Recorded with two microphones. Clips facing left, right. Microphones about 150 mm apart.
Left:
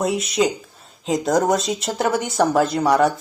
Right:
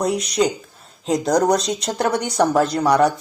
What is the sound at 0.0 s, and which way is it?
A man's voice, centre (ahead or behind).